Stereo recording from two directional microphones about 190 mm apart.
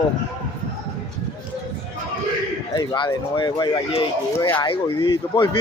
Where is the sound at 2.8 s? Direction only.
20° left (ahead or behind).